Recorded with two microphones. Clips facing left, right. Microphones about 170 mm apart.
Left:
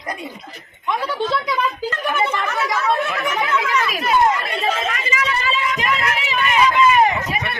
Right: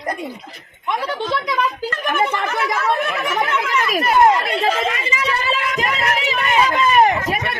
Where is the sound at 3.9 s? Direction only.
45° right (ahead or behind).